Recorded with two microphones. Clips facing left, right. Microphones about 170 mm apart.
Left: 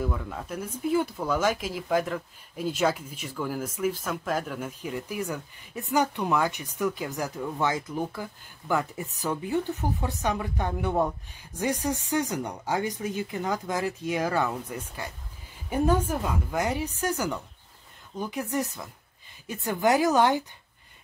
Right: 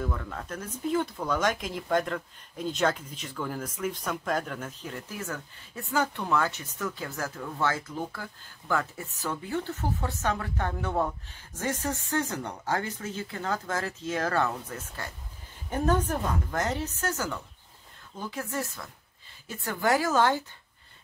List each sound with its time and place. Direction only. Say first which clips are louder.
0.0 s speech: left 2 dB; 5° left (ahead or behind)